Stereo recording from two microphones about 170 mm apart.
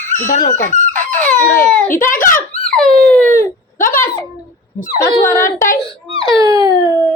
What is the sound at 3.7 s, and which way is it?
Speech, 50° left (ahead or behind).